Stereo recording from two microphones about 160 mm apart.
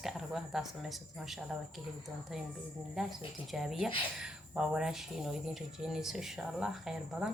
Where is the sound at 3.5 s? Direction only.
Centre (ahead or behind).